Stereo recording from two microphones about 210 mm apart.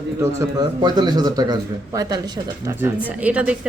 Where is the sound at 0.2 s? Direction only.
15° right (ahead or behind).